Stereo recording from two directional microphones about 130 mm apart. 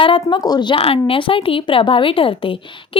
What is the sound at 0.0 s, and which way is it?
Speech, 40° left (ahead or behind).